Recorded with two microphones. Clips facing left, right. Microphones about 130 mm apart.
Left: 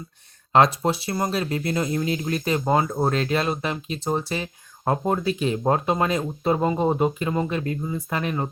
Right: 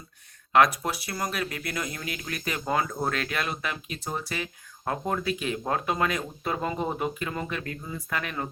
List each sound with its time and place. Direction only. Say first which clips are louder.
0.5 s speech: left 3 dB; 30° left (ahead or behind)